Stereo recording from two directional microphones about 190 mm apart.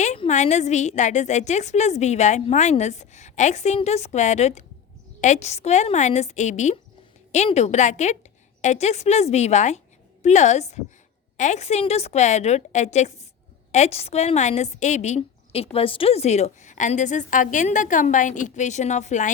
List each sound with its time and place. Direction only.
0.0 s a woman's voice: 40° left (ahead or behind)